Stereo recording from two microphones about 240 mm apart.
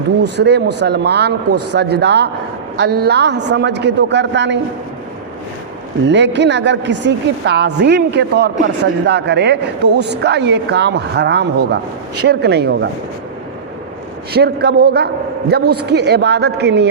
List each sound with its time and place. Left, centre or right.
0.2 s a woman's voice: right
6.1 s a woman's voice: right
14.3 s a man's voice: right